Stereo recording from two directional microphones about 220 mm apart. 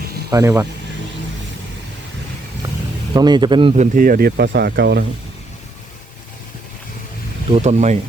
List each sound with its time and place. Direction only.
0.3 s speech: 15° right (ahead or behind)
3.1 s speech: 20° right (ahead or behind)
3.9 s speech: 40° right (ahead or behind)
7.5 s speech: 30° right (ahead or behind)